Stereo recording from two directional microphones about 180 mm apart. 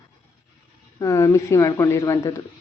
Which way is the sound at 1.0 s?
15° left (ahead or behind).